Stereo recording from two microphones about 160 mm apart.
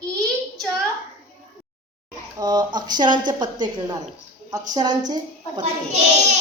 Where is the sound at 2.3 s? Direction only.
25° right (ahead or behind).